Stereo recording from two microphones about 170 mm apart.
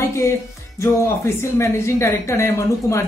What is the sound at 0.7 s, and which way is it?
Speech, 15° left (ahead or behind).